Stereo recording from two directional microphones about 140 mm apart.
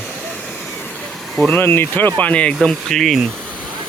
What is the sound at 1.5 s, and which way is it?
Speech, 15° left (ahead or behind).